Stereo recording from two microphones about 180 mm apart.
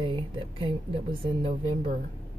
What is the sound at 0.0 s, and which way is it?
Speech, 30° right (ahead or behind).